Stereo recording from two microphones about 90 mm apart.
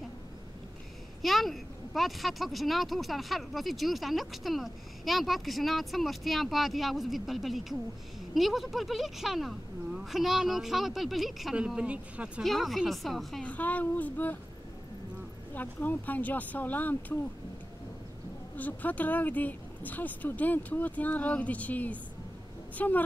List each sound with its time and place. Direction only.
1.2 s speech: centre (ahead or behind)
12.4 s speech: centre (ahead or behind)
13.4 s speech: 15° left (ahead or behind)
15.5 s speech: 20° left (ahead or behind)
18.6 s speech: 20° left (ahead or behind)